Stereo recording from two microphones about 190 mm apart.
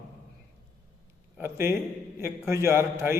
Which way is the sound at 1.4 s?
15° right (ahead or behind).